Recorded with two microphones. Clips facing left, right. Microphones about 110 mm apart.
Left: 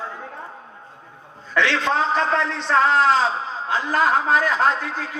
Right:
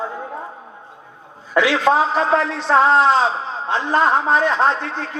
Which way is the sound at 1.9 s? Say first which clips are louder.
Right 10 dB; 40° right (ahead or behind).